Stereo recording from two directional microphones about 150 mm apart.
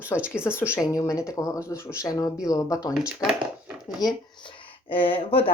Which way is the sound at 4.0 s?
30° left (ahead or behind).